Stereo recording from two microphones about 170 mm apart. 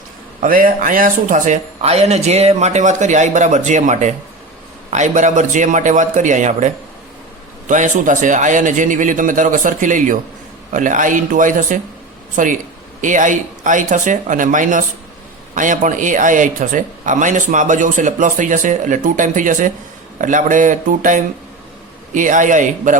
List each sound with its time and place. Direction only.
0.4 s speech: 55° right (ahead or behind)